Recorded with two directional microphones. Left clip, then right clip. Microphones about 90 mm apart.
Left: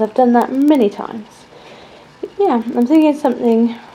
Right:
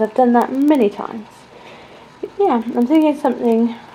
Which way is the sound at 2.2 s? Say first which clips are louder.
Left 1 dB; 20° left (ahead or behind).